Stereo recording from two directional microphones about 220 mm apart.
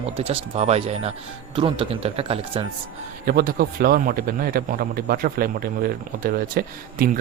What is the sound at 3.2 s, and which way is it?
A man's voice, 40° right (ahead or behind).